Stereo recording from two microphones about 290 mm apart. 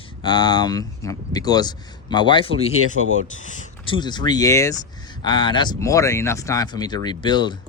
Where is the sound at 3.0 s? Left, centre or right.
Right.